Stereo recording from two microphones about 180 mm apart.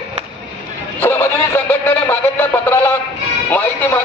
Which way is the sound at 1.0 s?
10° left (ahead or behind).